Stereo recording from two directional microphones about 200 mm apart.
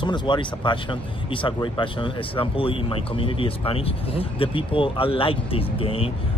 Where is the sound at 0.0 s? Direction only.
20° left (ahead or behind).